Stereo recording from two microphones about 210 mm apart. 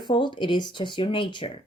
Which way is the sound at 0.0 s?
20° left (ahead or behind).